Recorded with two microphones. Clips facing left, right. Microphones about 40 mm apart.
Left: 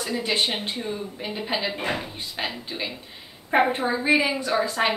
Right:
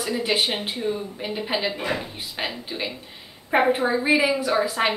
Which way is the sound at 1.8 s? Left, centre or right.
Left.